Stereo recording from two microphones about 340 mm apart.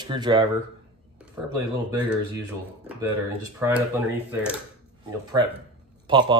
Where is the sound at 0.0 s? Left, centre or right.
Centre.